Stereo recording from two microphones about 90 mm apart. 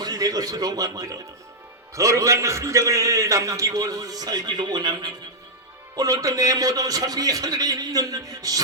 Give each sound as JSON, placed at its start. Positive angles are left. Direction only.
{"t": 0.0, "sound": "a man's voice", "side_deg": -45}